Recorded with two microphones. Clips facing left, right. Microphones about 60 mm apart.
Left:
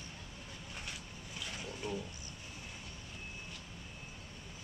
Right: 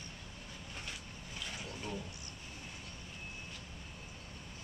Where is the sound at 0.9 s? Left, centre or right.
Centre.